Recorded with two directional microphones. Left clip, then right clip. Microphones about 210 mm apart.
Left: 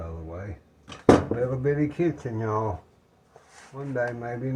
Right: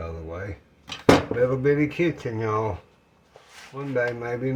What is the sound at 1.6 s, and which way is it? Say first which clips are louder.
Speech: right 3 dB; 30° right (ahead or behind).